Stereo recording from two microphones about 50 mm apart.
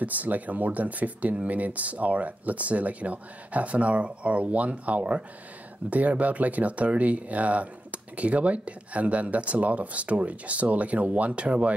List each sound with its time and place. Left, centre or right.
0.0 s speech: right